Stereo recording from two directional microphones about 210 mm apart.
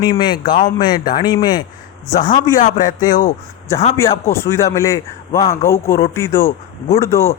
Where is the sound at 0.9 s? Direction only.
45° left (ahead or behind).